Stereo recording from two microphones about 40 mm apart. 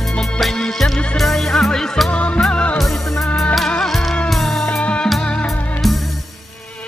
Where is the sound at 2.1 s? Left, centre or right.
Left.